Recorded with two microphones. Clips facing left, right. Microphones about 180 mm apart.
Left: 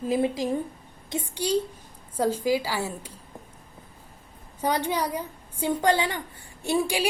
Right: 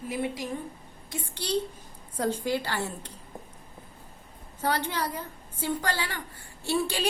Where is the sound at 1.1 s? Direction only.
10° left (ahead or behind).